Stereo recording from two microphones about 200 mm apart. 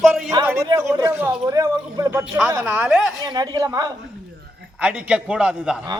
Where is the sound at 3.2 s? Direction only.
20° right (ahead or behind).